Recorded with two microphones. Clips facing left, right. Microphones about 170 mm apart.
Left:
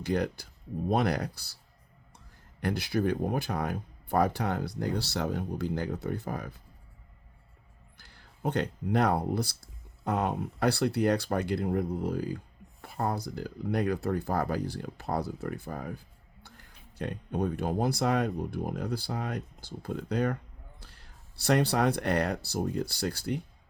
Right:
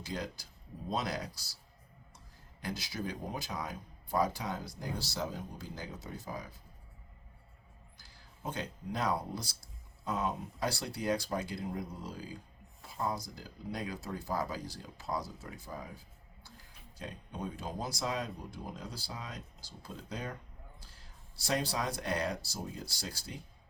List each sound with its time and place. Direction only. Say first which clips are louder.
0.0 s speech: left 10 dB; 60° left (ahead or behind)
7.9 s speech: left 2 dB; 65° left (ahead or behind)